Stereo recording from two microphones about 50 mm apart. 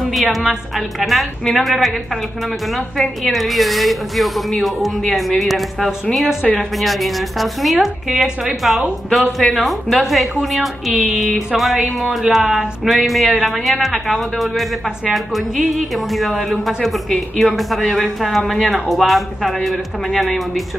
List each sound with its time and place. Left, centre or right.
0.1 s a woman's voice: centre